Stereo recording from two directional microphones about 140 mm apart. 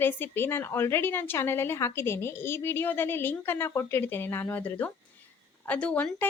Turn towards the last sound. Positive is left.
turn(degrees=10)  # may be behind; listen again after turning